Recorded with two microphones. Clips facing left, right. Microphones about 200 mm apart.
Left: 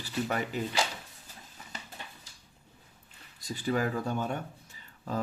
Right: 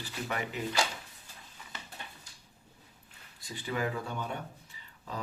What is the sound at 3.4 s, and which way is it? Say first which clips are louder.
Speech: left 4 dB; 40° left (ahead or behind).